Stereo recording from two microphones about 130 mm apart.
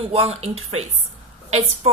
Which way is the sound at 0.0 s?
55° right (ahead or behind).